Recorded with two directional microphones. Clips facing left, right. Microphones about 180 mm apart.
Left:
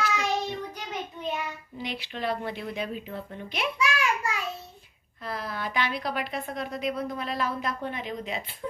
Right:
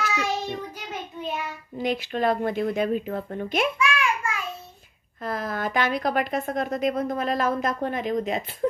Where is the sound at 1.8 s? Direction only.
45° right (ahead or behind).